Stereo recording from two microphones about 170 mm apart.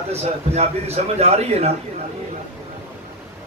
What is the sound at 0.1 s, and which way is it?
A man's voice, 40° right (ahead or behind).